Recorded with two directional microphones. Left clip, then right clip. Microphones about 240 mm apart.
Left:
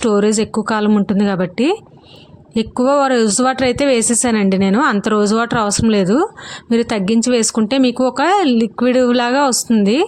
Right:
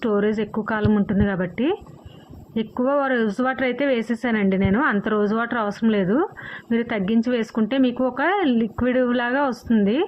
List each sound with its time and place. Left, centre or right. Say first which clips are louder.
0.0 s speech: left 7 dB; left